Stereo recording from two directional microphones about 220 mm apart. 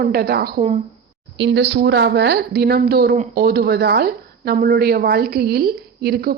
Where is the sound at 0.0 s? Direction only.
45° right (ahead or behind).